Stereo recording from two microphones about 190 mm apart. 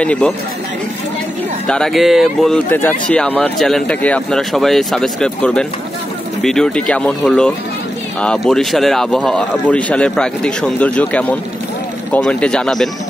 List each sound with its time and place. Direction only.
0.0 s speech: 5° left (ahead or behind)
1.7 s speech: centre (ahead or behind)